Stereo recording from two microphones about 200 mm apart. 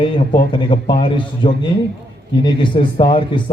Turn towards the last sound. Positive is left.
turn(degrees=25)  # may be behind; listen again after turning